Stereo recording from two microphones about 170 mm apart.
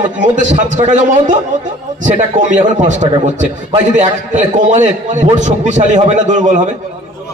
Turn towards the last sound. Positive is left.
turn(degrees=-45)  # may be behind; listen again after turning